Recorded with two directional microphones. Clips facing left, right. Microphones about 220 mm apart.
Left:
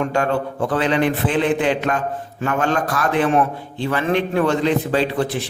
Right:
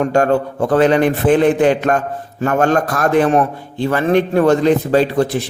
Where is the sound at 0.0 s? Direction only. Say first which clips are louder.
Right 6 dB; 45° right (ahead or behind).